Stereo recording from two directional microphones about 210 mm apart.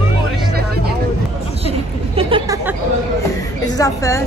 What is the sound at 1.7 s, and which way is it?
Chatter, 25° right (ahead or behind).